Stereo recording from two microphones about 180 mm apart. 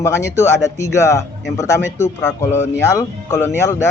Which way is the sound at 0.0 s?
15° left (ahead or behind).